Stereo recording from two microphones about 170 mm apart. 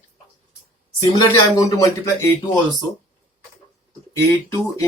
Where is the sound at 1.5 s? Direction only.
20° left (ahead or behind).